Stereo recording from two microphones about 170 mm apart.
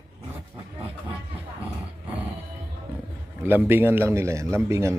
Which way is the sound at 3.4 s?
10° right (ahead or behind).